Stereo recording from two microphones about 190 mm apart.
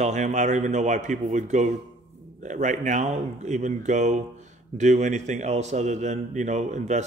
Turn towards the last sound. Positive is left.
turn(degrees=-40)  # may be behind; listen again after turning